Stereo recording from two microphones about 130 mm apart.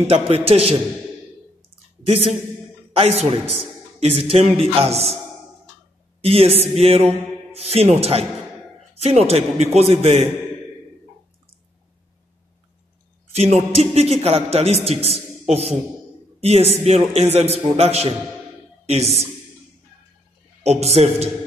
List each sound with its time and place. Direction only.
0.0 s a man's voice: 50° right (ahead or behind)
2.0 s a man's voice: 50° right (ahead or behind)
6.2 s a man's voice: 50° right (ahead or behind)
13.3 s a man's voice: 50° right (ahead or behind)
16.3 s a sound: 50° right (ahead or behind)
16.7 s a man's voice: 55° right (ahead or behind)
20.6 s a man's voice: 55° right (ahead or behind)